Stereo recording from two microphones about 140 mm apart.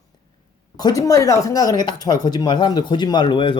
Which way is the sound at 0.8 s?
25° left (ahead or behind).